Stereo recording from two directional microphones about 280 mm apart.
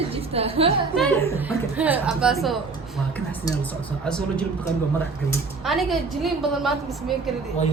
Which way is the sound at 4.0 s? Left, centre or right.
Centre.